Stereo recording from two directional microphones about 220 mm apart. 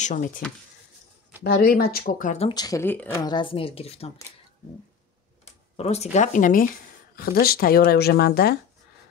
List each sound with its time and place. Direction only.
0.0 s speech: 35° left (ahead or behind)
1.4 s speech: 45° left (ahead or behind); by 3.2 s 10° left (ahead or behind)
3.3 s speech: 20° left (ahead or behind)
5.8 s speech: 30° left (ahead or behind); by 8.5 s 45° left (ahead or behind)